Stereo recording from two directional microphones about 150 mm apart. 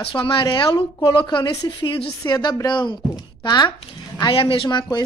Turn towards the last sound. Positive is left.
turn(degrees=30)  # may be behind; listen again after turning